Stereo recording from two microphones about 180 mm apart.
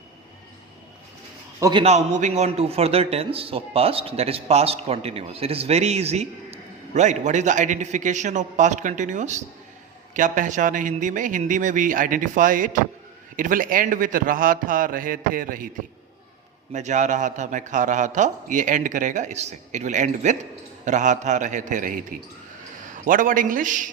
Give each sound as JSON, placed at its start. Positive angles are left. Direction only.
{"t": 1.5, "sound": "a man's voice", "side_deg": -20}
{"t": 1.8, "sound": "a man's voice", "side_deg": -40}
{"t": 16.7, "sound": "a man's voice", "side_deg": -40}
{"t": 23.0, "sound": "a man's voice", "side_deg": -50}